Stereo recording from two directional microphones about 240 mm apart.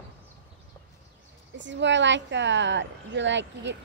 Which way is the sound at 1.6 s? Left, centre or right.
Right.